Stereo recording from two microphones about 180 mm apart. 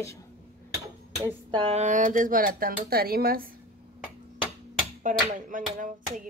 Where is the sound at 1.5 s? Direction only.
35° right (ahead or behind); by 3.5 s 55° right (ahead or behind).